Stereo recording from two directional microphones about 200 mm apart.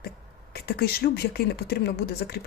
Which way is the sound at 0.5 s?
50° left (ahead or behind).